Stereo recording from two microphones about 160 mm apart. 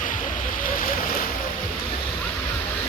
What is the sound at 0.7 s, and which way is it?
Boat, 60° left (ahead or behind).